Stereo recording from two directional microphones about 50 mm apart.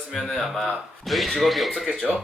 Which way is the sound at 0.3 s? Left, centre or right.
Centre.